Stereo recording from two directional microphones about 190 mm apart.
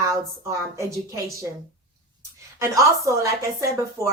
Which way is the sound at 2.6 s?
15° right (ahead or behind).